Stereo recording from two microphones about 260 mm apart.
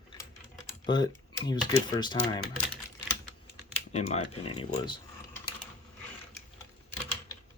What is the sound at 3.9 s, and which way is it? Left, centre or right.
Speech, left.